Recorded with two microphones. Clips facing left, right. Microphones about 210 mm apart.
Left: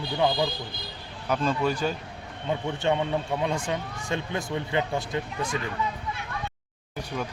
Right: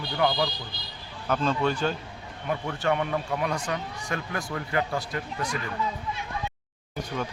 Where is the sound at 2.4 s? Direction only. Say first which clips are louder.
Left 1 dB; 20° left (ahead or behind).